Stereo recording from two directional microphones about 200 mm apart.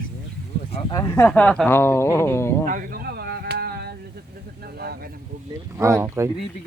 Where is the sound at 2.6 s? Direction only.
45° right (ahead or behind).